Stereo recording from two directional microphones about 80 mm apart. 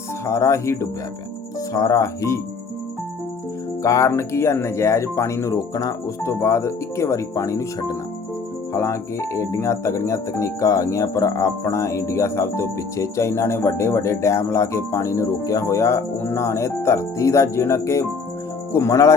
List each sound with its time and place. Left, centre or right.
0.3 s speech: left
3.8 s speech: left
6.2 s speech: left